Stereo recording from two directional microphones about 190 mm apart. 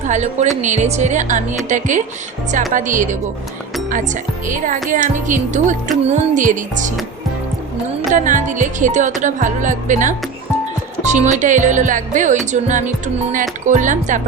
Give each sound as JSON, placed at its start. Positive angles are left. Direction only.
{"t": 0.0, "sound": "a woman's voice", "side_deg": -40}
{"t": 8.1, "sound": "speech", "side_deg": -40}